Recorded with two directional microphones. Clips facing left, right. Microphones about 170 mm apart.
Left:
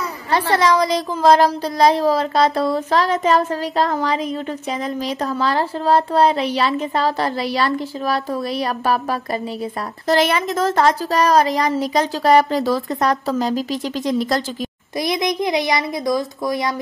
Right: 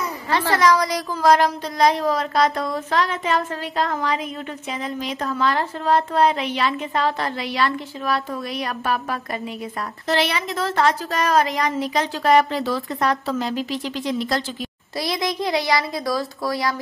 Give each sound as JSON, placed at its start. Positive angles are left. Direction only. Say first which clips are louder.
{"t": 0.3, "sound": "speech", "louder": "left 2 dB", "side_deg": 30}
{"t": 10.0, "sound": "speech", "louder": "left 5 dB", "side_deg": 45}
{"t": 15.0, "sound": "a child's voice", "louder": "left 4 dB", "side_deg": 20}